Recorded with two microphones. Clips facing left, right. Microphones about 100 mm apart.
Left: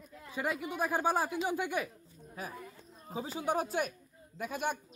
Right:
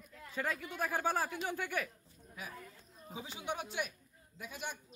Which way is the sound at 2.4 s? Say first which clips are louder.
Left 5 dB; 40° left (ahead or behind).